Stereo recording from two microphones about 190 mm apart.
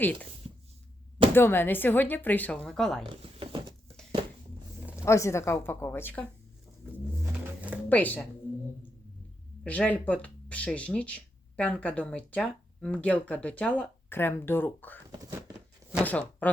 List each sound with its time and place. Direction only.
0.0 s speech: 10° left (ahead or behind)
1.4 s speech: 10° left (ahead or behind)
3.1 s a sound: 25° right (ahead or behind)
5.0 s speech: 15° left (ahead or behind)
7.2 s vehicle: 10° right (ahead or behind)
7.9 s speech: 10° left (ahead or behind)
9.6 s speech: 5° left (ahead or behind)
15.2 s a sound: 15° right (ahead or behind)
16.0 s speech: 10° left (ahead or behind)